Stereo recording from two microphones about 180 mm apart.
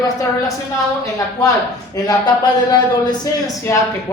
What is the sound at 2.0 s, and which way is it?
Speech, 25° left (ahead or behind).